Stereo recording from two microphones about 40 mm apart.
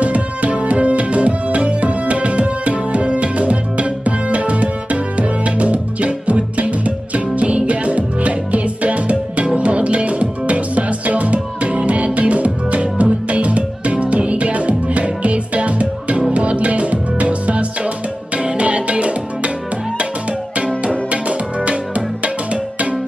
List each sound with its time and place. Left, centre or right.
0.0 s music: right
20.5 s music: right